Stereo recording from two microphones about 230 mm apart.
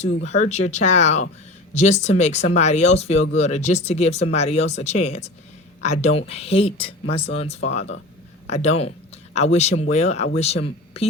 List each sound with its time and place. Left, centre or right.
0.2 s speech: left